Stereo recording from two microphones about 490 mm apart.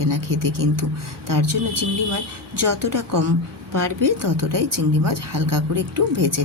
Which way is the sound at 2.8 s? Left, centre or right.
Right.